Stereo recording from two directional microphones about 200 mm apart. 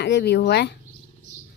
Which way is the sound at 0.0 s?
55° left (ahead or behind).